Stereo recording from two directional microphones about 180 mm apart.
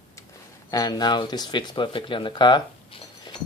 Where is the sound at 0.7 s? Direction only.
20° left (ahead or behind).